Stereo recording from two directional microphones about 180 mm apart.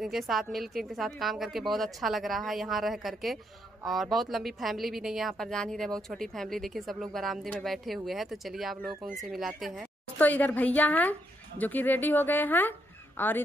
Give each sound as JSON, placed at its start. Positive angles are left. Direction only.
{"t": 0.0, "sound": "a woman's voice", "side_deg": 0}
{"t": 10.1, "sound": "speech", "side_deg": 10}